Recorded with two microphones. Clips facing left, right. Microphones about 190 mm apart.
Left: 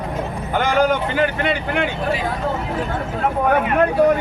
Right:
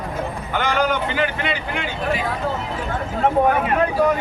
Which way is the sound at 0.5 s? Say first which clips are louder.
Left 4 dB; 50° left (ahead or behind).